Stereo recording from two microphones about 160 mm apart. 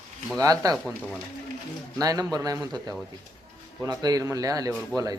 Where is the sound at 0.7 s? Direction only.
Centre (ahead or behind).